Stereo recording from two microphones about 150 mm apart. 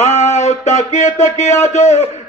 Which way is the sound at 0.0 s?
50° left (ahead or behind).